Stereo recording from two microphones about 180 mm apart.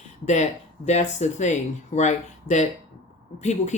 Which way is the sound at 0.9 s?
40° left (ahead or behind).